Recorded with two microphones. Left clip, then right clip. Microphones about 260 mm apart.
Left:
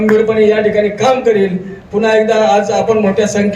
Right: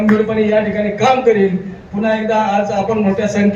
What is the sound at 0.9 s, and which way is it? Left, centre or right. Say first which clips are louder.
A man's voice: left 1 dB; left.